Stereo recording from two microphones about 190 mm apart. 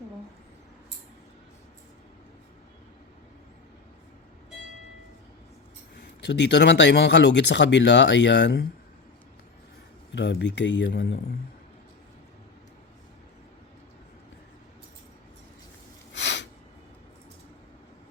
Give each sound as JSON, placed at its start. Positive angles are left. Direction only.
{"t": 6.2, "sound": "speech", "side_deg": 65}
{"t": 10.1, "sound": "speech", "side_deg": 65}
{"t": 16.1, "sound": "a sound", "side_deg": 70}